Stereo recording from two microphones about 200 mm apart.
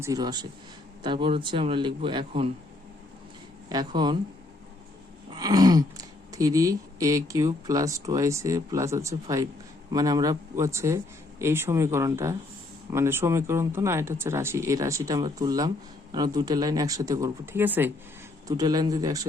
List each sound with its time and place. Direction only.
0.0 s a man's voice: 20° right (ahead or behind)
3.7 s a man's voice: 20° right (ahead or behind)
5.3 s a sound: 20° right (ahead or behind)
6.3 s a man's voice: 15° right (ahead or behind)